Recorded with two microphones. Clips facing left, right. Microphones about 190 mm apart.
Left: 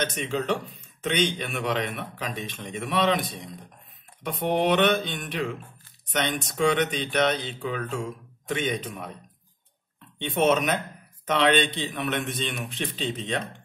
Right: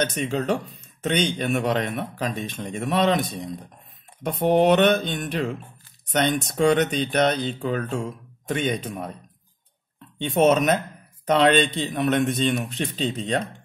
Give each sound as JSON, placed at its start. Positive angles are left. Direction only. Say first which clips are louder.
{"t": 0.0, "sound": "a man's voice", "louder": "right 4 dB", "side_deg": -45}
{"t": 10.2, "sound": "a man's voice", "louder": "right 4 dB", "side_deg": -45}